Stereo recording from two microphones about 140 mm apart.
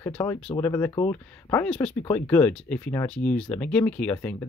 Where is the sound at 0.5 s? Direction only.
20° left (ahead or behind).